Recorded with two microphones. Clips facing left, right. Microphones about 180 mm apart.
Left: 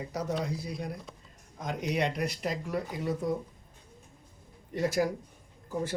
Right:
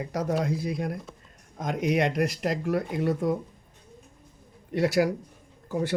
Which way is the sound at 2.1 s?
75° right (ahead or behind).